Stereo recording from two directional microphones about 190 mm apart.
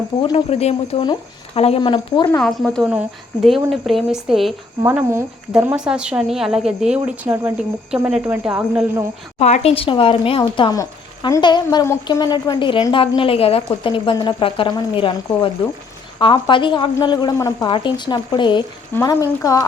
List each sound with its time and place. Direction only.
0.2 s speech: 30° left (ahead or behind)
2.4 s a woman's voice: 5° left (ahead or behind)
2.8 s a woman's voice: 5° right (ahead or behind)
4.8 s a woman's voice: 15° right (ahead or behind)
9.4 s speech: 35° left (ahead or behind); by 19.6 s 15° left (ahead or behind)